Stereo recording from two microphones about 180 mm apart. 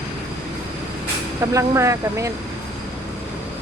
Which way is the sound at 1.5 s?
15° right (ahead or behind).